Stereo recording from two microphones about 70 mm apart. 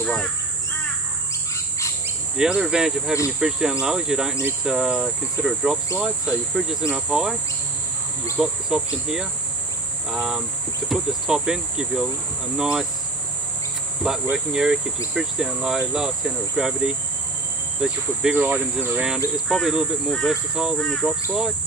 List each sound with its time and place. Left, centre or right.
0.0 s crow: centre
2.3 s speech: centre
8.4 s speech: centre
14.3 s speech: centre
18.3 s speech: centre
18.9 s speech: centre
20.7 s speech: centre
21.0 s speech: right